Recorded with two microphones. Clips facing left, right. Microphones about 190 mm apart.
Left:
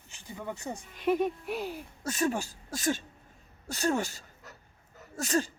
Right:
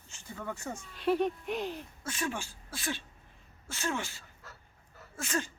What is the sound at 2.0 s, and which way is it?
Speech, 40° left (ahead or behind).